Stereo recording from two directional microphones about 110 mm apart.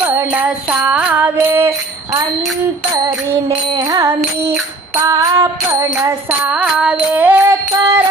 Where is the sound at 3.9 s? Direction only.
30° right (ahead or behind).